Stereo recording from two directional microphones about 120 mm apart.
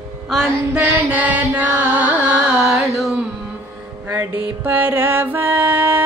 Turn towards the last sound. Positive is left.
turn(degrees=-15)  # may be behind; listen again after turning